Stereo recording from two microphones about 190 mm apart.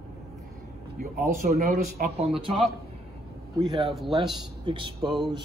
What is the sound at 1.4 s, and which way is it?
Speech, 40° right (ahead or behind).